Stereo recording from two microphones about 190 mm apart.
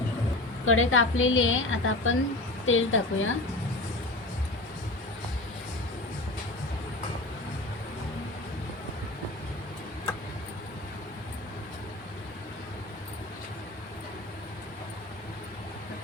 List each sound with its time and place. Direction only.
0.6 s a woman's voice: 90° left